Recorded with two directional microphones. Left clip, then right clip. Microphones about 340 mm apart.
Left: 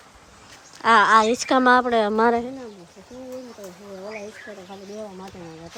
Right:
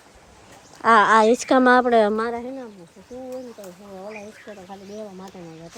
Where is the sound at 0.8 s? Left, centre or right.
Centre.